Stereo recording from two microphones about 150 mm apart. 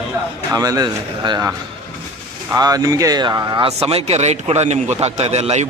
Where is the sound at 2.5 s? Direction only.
25° right (ahead or behind).